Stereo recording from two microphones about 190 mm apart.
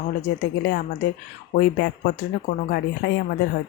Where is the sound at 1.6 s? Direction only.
55° left (ahead or behind).